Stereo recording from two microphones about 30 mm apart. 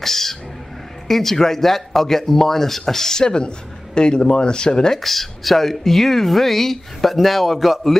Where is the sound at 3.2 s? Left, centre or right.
Left.